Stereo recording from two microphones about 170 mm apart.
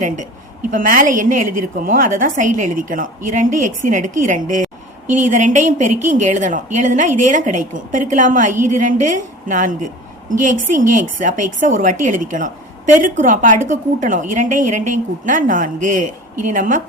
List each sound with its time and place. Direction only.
0.7 s a woman's voice: 55° right (ahead or behind)